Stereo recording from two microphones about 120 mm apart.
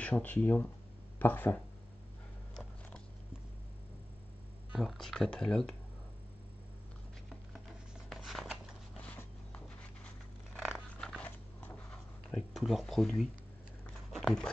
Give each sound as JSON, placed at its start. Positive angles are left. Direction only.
{"t": 0.0, "sound": "speech", "side_deg": 15}
{"t": 4.7, "sound": "speech", "side_deg": 0}
{"t": 8.1, "sound": "scissors", "side_deg": 0}
{"t": 9.0, "sound": "zipper", "side_deg": 10}
{"t": 11.0, "sound": "dog", "side_deg": 5}
{"t": 12.5, "sound": "speech", "side_deg": 0}
{"t": 14.1, "sound": "a sound", "side_deg": 5}